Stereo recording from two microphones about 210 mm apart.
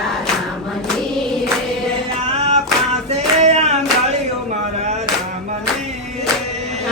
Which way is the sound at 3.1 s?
30° right (ahead or behind).